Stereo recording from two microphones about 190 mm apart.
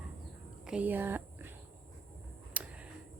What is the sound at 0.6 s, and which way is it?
Speech, 5° right (ahead or behind).